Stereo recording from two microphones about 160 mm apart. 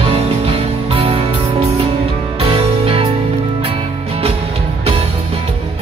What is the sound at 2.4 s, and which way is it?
Music, 35° right (ahead or behind).